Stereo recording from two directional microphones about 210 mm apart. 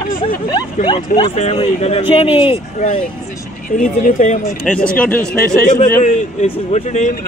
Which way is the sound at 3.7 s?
40° left (ahead or behind).